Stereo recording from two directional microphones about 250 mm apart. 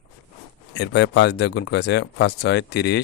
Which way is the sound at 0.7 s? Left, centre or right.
Left.